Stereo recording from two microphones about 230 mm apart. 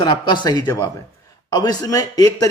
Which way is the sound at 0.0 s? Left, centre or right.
Centre.